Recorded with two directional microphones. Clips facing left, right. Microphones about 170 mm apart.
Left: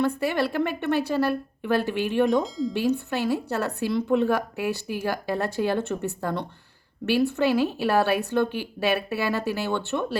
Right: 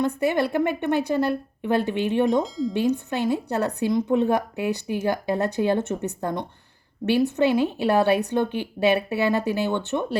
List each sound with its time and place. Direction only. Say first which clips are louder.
0.0 s a woman's voice: right 2 dB; 20° right (ahead or behind)
2.4 s speech: right 2 dB; centre (ahead or behind)
2.7 s a woman's voice: right 2 dB; 20° right (ahead or behind)